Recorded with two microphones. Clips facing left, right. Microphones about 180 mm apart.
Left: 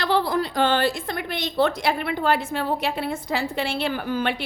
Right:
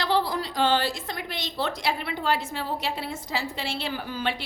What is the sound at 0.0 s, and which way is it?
A woman's voice, 55° left (ahead or behind).